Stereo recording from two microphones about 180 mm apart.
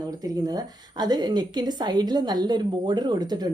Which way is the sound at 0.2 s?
20° right (ahead or behind).